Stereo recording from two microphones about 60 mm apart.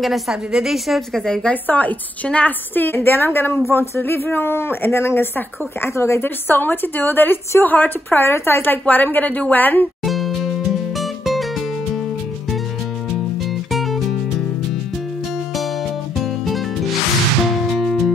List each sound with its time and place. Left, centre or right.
0.0 s a woman's voice: centre
1.2 s a woman's voice: centre
1.5 s a woman's voice: left
2.7 s a woman's voice: left
3.7 s a sound: left
4.0 s a woman's voice: left
6.2 s a woman's voice: left
8.8 s a woman's voice: left
10.0 s music: centre
13.5 s music: centre
16.2 s music: centre
17.7 s music: centre